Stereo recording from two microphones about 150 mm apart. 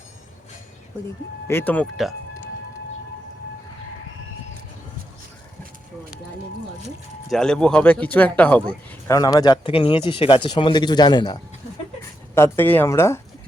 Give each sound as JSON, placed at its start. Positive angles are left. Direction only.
{"t": 1.5, "sound": "speech", "side_deg": 15}
{"t": 7.3, "sound": "speech", "side_deg": 5}
{"t": 9.0, "sound": "speech", "side_deg": 25}
{"t": 12.3, "sound": "speech", "side_deg": 15}